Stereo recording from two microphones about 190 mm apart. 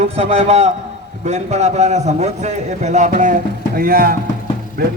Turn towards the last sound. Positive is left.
turn(degrees=-55)  # may be behind; listen again after turning